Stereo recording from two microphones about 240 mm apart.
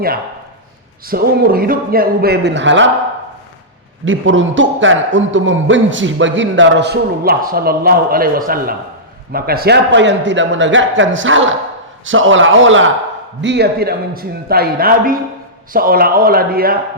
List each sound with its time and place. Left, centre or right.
1.0 s a man's voice: right
4.0 s a man's voice: right